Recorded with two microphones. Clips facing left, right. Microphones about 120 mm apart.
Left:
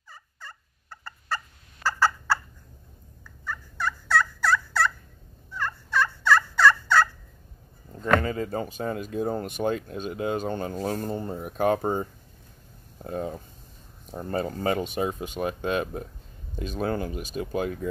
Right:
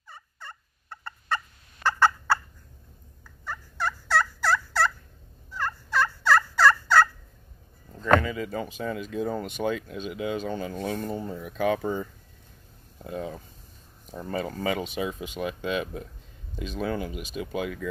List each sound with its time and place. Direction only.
0.1 s fowl: 25° right (ahead or behind)
1.0 s fowl: 5° left (ahead or behind)
4.1 s fowl: 30° right (ahead or behind)
5.9 s fowl: 5° right (ahead or behind)
8.2 s speech: 40° left (ahead or behind)